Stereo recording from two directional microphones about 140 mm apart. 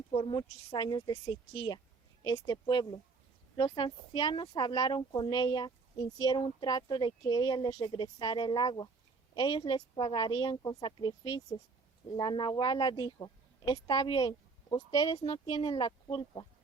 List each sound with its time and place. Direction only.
0.1 s speech: 40° left (ahead or behind)
15.3 s speech: 40° left (ahead or behind)